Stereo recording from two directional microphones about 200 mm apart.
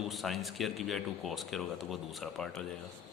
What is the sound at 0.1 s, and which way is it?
Speech, centre (ahead or behind).